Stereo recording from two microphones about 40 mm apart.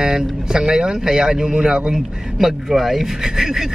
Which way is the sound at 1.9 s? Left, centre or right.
Centre.